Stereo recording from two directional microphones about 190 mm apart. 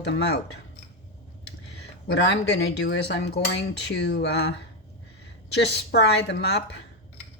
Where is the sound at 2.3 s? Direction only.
65° left (ahead or behind).